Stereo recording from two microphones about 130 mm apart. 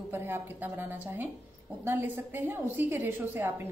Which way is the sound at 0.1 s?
15° right (ahead or behind).